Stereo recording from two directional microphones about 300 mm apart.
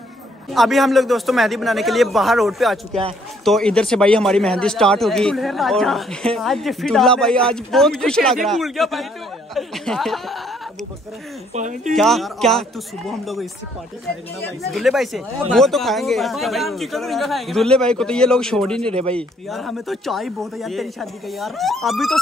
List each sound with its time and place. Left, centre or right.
0.5 s speech: centre
11.5 s speech: right
11.9 s speech: centre
14.7 s speech: centre